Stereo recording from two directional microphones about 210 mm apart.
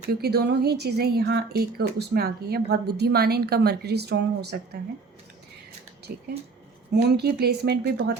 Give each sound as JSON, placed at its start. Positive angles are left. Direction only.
{"t": 0.1, "sound": "a woman's voice", "side_deg": -50}
{"t": 6.1, "sound": "a woman's voice", "side_deg": -45}